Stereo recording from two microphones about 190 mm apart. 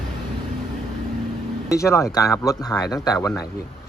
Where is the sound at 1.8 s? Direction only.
15° left (ahead or behind).